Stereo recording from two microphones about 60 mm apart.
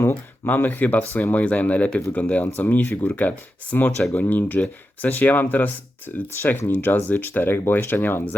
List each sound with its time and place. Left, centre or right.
0.0 s speech: left
3.1 s speech: left